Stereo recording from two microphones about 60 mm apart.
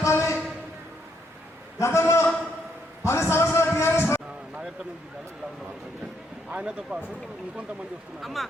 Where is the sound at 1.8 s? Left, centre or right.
Left.